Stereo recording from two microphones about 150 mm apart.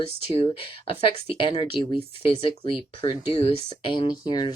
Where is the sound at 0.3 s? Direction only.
35° left (ahead or behind).